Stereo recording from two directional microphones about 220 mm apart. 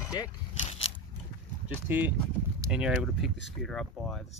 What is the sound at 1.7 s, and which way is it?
Speech, 10° right (ahead or behind).